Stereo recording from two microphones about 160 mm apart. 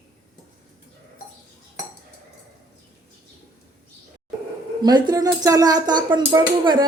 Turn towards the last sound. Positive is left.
turn(degrees=-30)  # may be behind; listen again after turning